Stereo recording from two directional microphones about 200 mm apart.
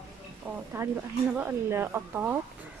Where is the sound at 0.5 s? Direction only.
5° right (ahead or behind).